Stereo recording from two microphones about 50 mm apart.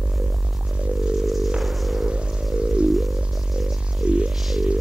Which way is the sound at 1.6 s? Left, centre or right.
Centre.